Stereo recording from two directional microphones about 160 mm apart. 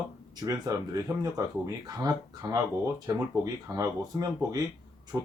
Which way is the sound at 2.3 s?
25° right (ahead or behind).